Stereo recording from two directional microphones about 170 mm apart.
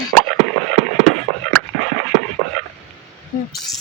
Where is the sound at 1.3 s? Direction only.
15° left (ahead or behind).